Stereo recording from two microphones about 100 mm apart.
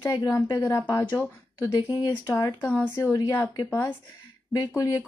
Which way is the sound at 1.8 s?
45° left (ahead or behind).